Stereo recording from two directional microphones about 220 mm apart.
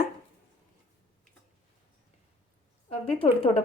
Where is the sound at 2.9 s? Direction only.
25° left (ahead or behind).